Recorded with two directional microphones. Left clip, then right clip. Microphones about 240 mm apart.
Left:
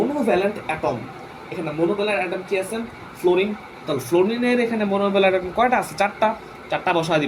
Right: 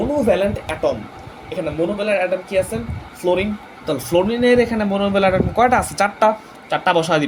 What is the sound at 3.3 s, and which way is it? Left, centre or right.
Speech, right.